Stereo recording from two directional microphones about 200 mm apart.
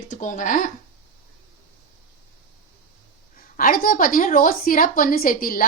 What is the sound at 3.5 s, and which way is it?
A woman's voice, 45° left (ahead or behind).